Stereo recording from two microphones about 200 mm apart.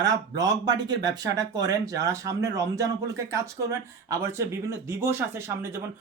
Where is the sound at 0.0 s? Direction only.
20° right (ahead or behind).